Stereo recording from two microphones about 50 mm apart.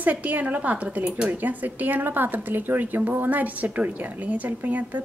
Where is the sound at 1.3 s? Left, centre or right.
Right.